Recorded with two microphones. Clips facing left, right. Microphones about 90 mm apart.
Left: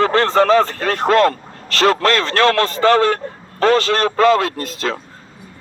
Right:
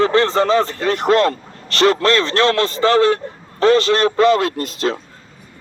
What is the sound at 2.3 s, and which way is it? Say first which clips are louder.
Speech: left 1 dB; 25° right (ahead or behind).